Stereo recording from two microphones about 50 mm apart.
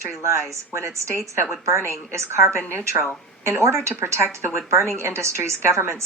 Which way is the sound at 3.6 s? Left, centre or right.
Right.